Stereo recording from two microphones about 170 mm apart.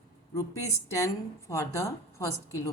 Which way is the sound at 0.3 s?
20° left (ahead or behind).